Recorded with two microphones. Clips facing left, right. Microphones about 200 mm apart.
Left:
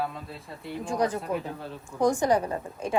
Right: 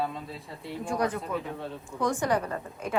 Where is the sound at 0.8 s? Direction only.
30° left (ahead or behind).